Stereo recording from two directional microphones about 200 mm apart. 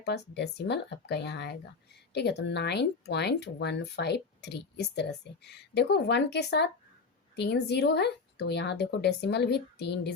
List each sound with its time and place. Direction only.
0.0 s speech: 55° left (ahead or behind)